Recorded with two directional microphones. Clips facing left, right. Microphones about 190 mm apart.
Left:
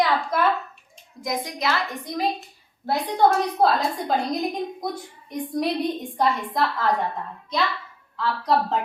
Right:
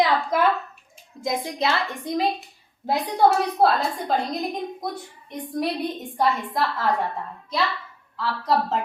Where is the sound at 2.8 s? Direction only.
10° right (ahead or behind).